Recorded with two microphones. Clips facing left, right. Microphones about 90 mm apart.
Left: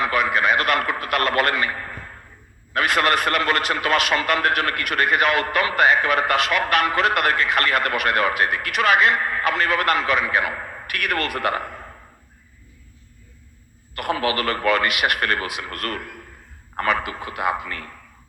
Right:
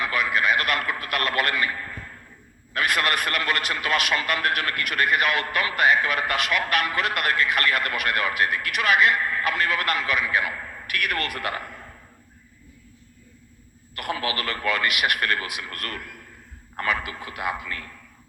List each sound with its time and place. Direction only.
0.0 s a sound: 30° left (ahead or behind)
2.7 s a man's voice: 30° left (ahead or behind)
13.9 s a man's voice: 35° left (ahead or behind)